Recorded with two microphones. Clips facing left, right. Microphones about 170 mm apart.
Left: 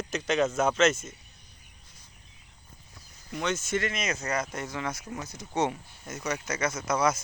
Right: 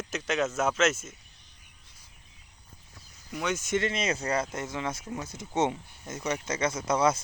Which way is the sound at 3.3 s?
5° right (ahead or behind).